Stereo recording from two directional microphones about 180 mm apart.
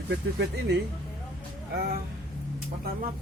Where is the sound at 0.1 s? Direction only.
70° right (ahead or behind).